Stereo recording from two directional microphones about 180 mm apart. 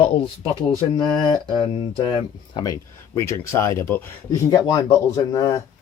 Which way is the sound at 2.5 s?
25° left (ahead or behind).